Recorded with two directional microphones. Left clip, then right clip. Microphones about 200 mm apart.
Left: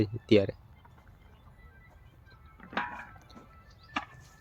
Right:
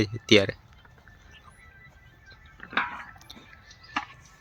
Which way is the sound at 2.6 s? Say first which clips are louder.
Right 6 dB; 50° left (ahead or behind).